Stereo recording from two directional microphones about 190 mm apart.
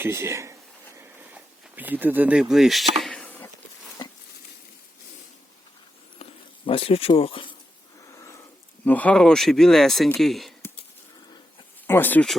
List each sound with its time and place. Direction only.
0.0 s speech: 15° right (ahead or behind)
0.9 s a sound: 10° right (ahead or behind); by 3.5 s 10° left (ahead or behind)
6.7 s speech: 30° left (ahead or behind)
8.0 s a sound: 15° left (ahead or behind)
8.8 s speech: 10° left (ahead or behind)
11.9 s speech: 10° left (ahead or behind)